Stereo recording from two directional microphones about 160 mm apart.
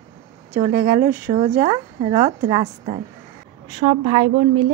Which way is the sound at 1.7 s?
35° right (ahead or behind).